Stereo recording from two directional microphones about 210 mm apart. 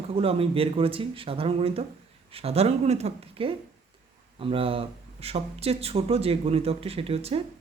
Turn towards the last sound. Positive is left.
turn(degrees=-30)  # may be behind; listen again after turning